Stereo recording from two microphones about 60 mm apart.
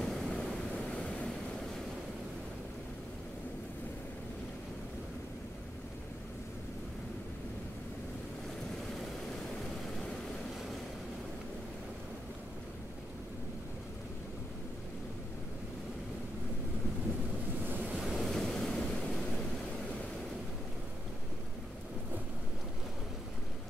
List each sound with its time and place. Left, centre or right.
0.0 s vehicle: centre
17.6 s waves: right
18.0 s waves: centre